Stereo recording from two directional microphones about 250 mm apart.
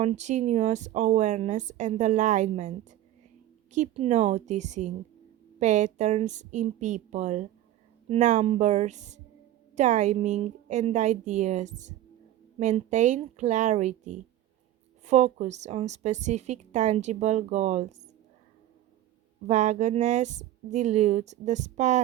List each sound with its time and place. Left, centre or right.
0.0 s speech: right
19.5 s speech: right